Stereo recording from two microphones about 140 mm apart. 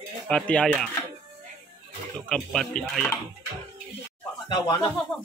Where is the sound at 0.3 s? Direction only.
5° left (ahead or behind).